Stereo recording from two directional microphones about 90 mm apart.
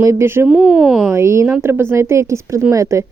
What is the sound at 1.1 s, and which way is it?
Speech, 30° right (ahead or behind).